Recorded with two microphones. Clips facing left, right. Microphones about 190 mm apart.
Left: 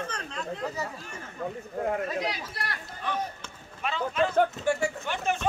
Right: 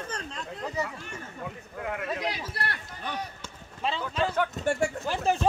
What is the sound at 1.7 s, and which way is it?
Speech, 40° left (ahead or behind).